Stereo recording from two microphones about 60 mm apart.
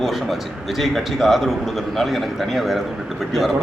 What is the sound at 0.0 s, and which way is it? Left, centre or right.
A man's voice, centre.